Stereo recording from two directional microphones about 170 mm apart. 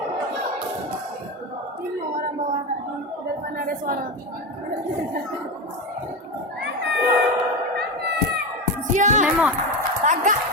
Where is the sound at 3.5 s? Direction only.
55° right (ahead or behind).